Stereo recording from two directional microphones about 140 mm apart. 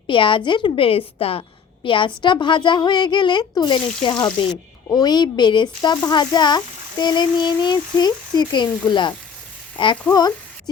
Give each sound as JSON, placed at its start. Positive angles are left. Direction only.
{"t": 0.1, "sound": "a woman's voice", "side_deg": 35}